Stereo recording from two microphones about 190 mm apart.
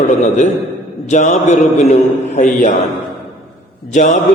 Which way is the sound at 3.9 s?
40° left (ahead or behind).